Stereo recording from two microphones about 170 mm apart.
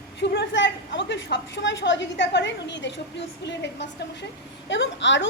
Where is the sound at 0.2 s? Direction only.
90° left.